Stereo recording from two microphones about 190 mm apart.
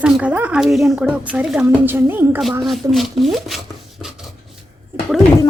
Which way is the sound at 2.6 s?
Centre (ahead or behind).